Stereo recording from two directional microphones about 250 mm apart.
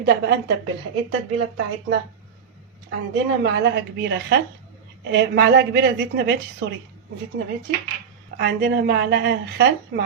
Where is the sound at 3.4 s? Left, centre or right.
Right.